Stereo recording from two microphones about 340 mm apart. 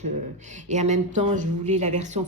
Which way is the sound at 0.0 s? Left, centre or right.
Right.